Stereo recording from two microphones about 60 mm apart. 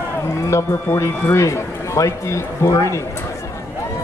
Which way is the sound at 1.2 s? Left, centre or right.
Left.